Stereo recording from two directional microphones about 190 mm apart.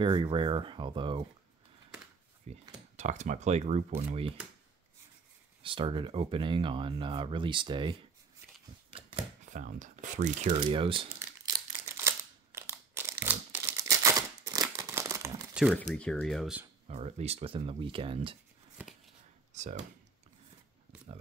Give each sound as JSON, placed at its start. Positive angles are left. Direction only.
{"t": 0.0, "sound": "speech", "side_deg": -25}
{"t": 2.4, "sound": "speech", "side_deg": -35}
{"t": 5.6, "sound": "speech", "side_deg": -25}
{"t": 9.5, "sound": "speech", "side_deg": -40}
{"t": 11.1, "sound": "a sound", "side_deg": -15}
{"t": 15.5, "sound": "speech", "side_deg": -5}
{"t": 16.8, "sound": "speech", "side_deg": -35}
{"t": 18.8, "sound": "a sound", "side_deg": 0}
{"t": 19.5, "sound": "speech", "side_deg": -40}